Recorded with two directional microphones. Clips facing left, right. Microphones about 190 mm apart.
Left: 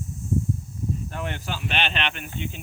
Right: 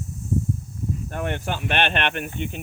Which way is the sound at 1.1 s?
55° right (ahead or behind).